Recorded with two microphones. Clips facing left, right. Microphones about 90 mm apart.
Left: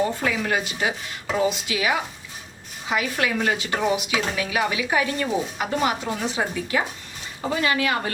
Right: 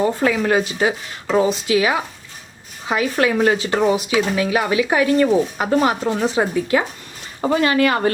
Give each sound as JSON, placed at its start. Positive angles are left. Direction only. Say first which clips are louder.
{"t": 0.2, "sound": "speech", "louder": "right 7 dB", "side_deg": -45}